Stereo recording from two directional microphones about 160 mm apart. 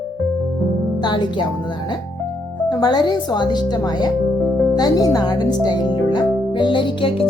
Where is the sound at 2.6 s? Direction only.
30° left (ahead or behind).